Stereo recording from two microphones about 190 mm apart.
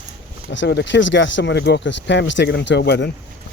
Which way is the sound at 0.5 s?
65° left (ahead or behind).